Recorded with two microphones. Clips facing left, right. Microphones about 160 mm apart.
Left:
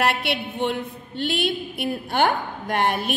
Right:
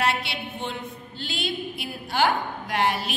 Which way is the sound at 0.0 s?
60° left (ahead or behind).